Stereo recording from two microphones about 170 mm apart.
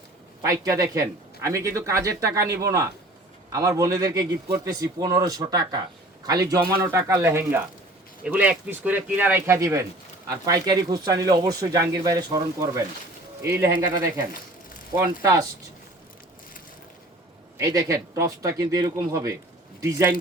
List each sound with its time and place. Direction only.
0.4 s speech: 20° right (ahead or behind)
3.5 s a man's voice: 20° right (ahead or behind)
17.6 s a man's voice: 20° right (ahead or behind)